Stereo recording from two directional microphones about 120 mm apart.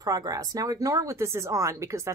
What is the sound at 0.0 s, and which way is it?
Speech, 30° right (ahead or behind).